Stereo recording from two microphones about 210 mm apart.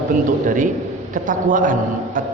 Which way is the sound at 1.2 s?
40° right (ahead or behind).